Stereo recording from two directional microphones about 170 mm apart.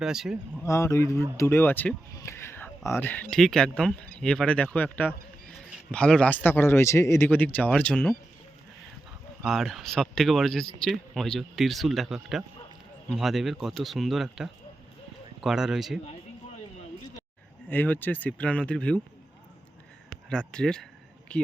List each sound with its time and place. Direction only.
0.0 s speech: 5° right (ahead or behind)
0.6 s speech: 15° left (ahead or behind)
9.4 s speech: centre (ahead or behind)
17.7 s speech: 10° left (ahead or behind)
20.1 s speech: 5° left (ahead or behind)